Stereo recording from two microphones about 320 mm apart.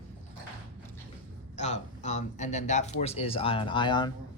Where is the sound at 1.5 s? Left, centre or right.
Left.